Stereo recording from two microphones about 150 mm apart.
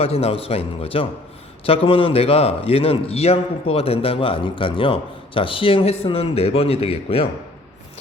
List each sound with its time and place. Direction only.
0.0 s a man's voice: 40° left (ahead or behind)